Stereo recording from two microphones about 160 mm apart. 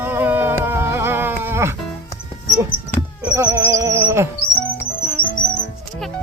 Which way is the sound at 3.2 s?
15° right (ahead or behind).